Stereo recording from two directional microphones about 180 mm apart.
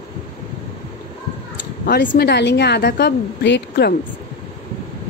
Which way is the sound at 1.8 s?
65° left (ahead or behind).